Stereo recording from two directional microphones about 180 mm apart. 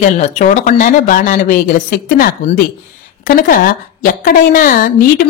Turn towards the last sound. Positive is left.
turn(degrees=50)  # may be behind; listen again after turning